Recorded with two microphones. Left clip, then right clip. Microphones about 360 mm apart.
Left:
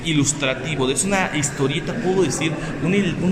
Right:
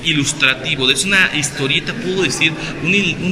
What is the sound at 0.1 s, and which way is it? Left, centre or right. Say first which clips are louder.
A man's voice: right 6 dB; centre.